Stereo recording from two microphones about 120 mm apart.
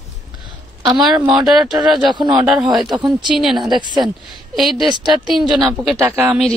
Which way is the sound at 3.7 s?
40° right (ahead or behind).